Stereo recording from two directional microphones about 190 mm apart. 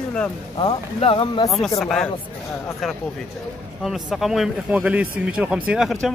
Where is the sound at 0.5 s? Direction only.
25° left (ahead or behind).